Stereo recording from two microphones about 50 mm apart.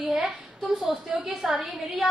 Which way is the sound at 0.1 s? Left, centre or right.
Centre.